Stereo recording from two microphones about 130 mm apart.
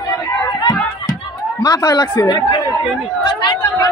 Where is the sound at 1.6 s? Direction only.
30° left (ahead or behind).